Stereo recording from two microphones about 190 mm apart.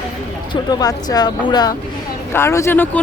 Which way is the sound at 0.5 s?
20° left (ahead or behind).